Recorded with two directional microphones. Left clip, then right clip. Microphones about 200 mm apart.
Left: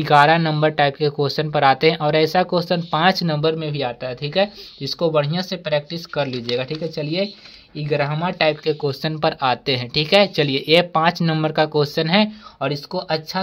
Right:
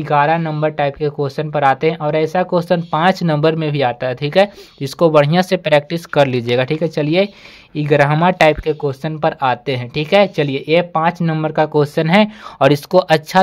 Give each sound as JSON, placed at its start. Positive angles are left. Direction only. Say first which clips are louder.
{"t": 0.0, "sound": "speech", "louder": "left 1 dB", "side_deg": 0}
{"t": 8.6, "sound": "speech", "louder": "right 2 dB", "side_deg": -15}
{"t": 12.5, "sound": "speech", "louder": "right 13 dB", "side_deg": -45}